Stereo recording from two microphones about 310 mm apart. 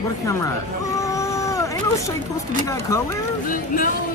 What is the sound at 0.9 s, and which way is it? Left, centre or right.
Cat, centre.